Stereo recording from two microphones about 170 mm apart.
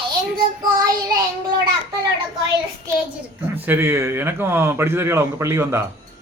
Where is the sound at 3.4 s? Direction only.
10° right (ahead or behind).